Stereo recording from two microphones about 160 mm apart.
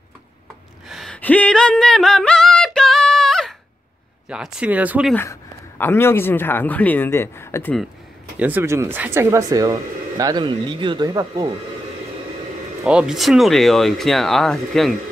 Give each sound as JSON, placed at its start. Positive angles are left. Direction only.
{"t": 0.8, "sound": "a sound", "side_deg": 0}
{"t": 4.3, "sound": "speech", "side_deg": -5}
{"t": 5.1, "sound": "a man's voice", "side_deg": 15}
{"t": 8.4, "sound": "speech", "side_deg": -10}
{"t": 12.8, "sound": "speech", "side_deg": -5}